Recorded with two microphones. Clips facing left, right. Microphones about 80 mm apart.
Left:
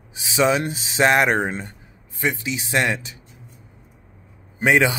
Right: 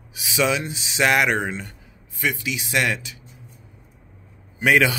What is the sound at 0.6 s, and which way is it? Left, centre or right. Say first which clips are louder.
Speech: left 3 dB; left.